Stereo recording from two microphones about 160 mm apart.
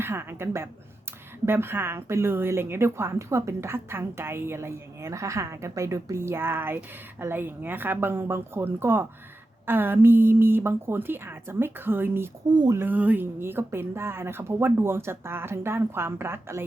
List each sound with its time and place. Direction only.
0.0 s a woman's voice: 15° right (ahead or behind)
12.5 s speech: 30° right (ahead or behind)
12.7 s a woman's voice: 10° right (ahead or behind)